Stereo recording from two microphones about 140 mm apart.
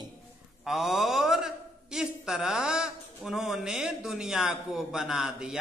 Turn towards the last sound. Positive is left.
turn(degrees=-5)  # may be behind; listen again after turning